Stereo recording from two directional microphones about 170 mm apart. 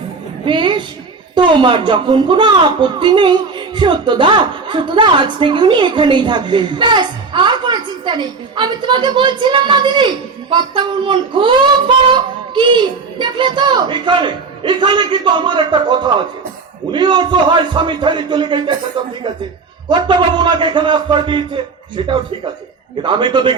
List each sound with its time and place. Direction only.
0.4 s music: 30° right (ahead or behind)
1.4 s a woman's voice: 30° right (ahead or behind)
19.9 s a woman's voice: 25° right (ahead or behind)